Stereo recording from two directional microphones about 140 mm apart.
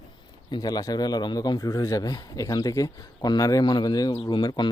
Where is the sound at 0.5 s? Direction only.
30° left (ahead or behind).